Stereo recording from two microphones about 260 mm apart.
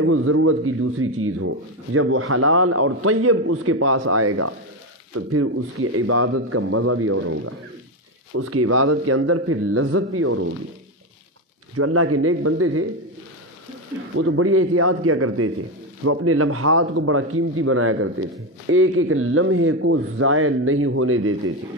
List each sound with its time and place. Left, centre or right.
0.0 s a man's voice: right
11.7 s a man's voice: right
14.1 s a man's voice: right